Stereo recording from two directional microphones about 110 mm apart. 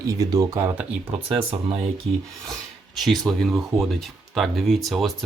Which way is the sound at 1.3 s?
55° right (ahead or behind).